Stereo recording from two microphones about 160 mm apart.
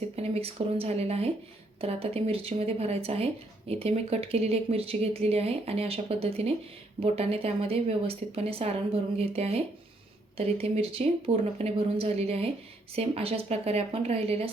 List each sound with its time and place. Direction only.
0.2 s speech: 40° right (ahead or behind)